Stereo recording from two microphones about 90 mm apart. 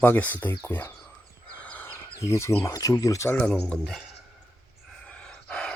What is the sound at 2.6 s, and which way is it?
Speech, 40° left (ahead or behind).